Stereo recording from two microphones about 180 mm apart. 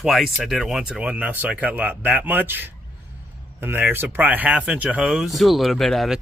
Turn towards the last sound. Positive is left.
turn(degrees=0)  # may be behind; listen again after turning